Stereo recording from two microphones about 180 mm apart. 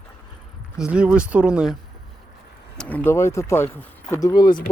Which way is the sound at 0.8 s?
5° right (ahead or behind).